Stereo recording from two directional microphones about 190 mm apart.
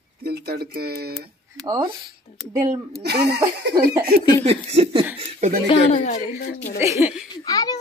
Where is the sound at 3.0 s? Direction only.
60° right (ahead or behind).